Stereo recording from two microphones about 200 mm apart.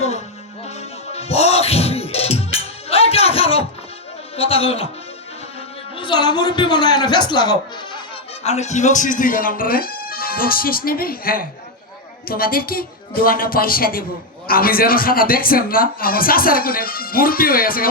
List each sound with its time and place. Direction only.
0.6 s music: 30° left (ahead or behind)
4.4 s a man's voice: 30° left (ahead or behind)
6.0 s a man's voice: 25° left (ahead or behind)
8.4 s a man's voice: 35° left (ahead or behind)